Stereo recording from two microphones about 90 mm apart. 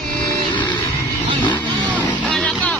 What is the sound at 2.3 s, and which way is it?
Vehicle, 10° left (ahead or behind).